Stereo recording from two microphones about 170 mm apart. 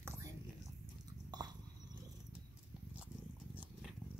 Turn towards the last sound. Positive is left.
turn(degrees=-10)  # may be behind; listen again after turning